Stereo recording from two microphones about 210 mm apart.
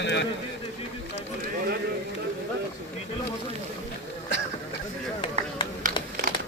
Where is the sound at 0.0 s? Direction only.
55° left (ahead or behind).